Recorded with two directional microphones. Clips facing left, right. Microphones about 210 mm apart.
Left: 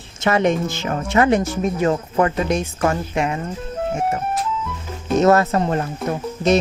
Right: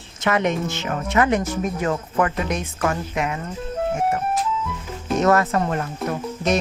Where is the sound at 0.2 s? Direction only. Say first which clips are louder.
Left 3 dB; 30° left (ahead or behind).